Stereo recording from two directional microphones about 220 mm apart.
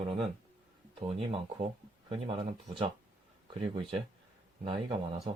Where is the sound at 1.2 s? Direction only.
25° right (ahead or behind).